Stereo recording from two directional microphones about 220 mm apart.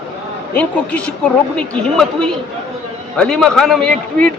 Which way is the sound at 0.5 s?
5° left (ahead or behind).